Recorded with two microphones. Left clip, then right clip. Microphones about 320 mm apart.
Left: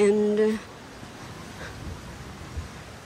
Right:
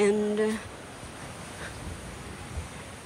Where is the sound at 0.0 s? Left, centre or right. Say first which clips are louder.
Left 4 dB; centre.